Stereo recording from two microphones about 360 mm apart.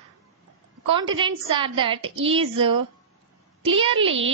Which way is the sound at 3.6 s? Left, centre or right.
Centre.